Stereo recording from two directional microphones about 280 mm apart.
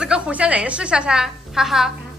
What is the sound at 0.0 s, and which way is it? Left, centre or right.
A woman's voice, centre.